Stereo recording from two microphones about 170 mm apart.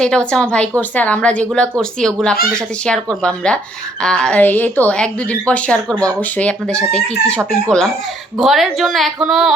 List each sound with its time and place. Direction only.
0.0 s speech: 5° left (ahead or behind)